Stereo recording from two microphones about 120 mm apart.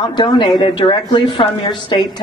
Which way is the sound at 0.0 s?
40° left (ahead or behind).